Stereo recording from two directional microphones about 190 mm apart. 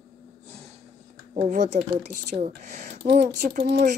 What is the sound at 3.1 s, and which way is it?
Speech, 55° right (ahead or behind).